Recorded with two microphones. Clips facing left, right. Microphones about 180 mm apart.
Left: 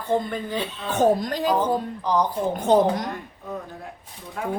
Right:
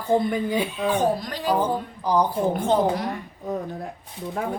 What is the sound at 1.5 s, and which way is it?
Speech, 10° right (ahead or behind).